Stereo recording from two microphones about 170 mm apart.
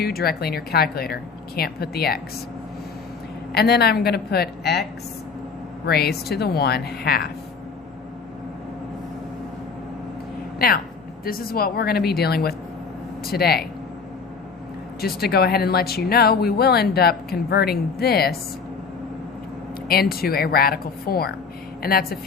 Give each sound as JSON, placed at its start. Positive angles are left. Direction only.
{"t": 0.0, "sound": "a woman's voice", "side_deg": 65}
{"t": 3.5, "sound": "speech", "side_deg": 70}
{"t": 10.6, "sound": "a woman's voice", "side_deg": 60}
{"t": 15.0, "sound": "speech", "side_deg": 65}
{"t": 19.9, "sound": "a woman's voice", "side_deg": 65}